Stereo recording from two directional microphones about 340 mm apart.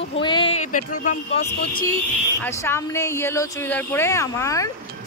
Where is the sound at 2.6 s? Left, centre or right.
Centre.